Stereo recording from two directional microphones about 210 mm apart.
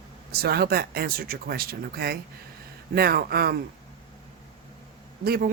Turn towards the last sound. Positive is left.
turn(degrees=-45)  # may be behind; listen again after turning